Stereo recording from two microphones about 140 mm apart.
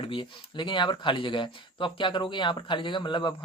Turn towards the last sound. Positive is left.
turn(degrees=35)  # may be behind; listen again after turning